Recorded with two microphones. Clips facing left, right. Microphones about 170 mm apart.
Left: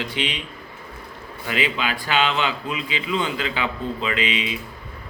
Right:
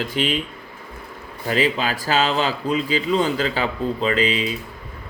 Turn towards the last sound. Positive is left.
turn(degrees=-40)  # may be behind; listen again after turning